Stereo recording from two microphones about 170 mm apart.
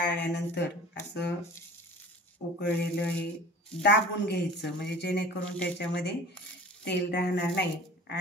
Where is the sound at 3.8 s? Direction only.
75° left (ahead or behind).